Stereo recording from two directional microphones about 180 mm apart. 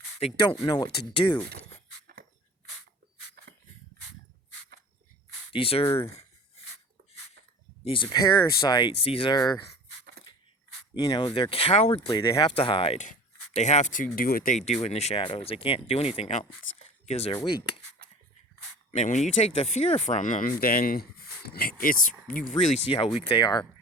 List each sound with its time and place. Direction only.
0.2 s speech: 35° left (ahead or behind)
0.6 s speech: 25° left (ahead or behind)
3.4 s a sound: 60° right (ahead or behind)
5.5 s speech: 30° left (ahead or behind)
7.9 s speech: 30° left (ahead or behind)
10.9 s speech: 20° left (ahead or behind)
18.9 s speech: 40° left (ahead or behind); by 23.6 s 25° left (ahead or behind)